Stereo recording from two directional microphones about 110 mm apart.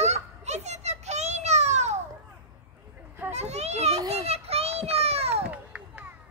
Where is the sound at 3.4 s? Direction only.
80° right.